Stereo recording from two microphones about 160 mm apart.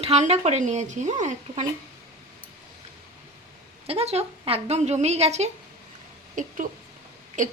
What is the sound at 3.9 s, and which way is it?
A woman's voice, 40° right (ahead or behind).